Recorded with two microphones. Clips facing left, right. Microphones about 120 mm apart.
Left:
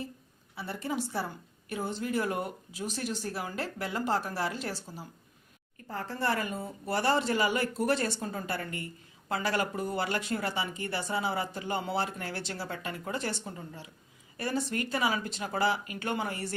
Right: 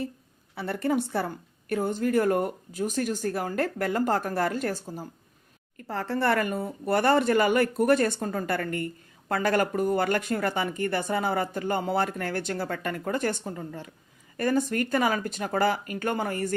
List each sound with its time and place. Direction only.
0.5 s speech: 60° right (ahead or behind)
5.7 s speech: 90° right; by 16.6 s 45° right (ahead or behind)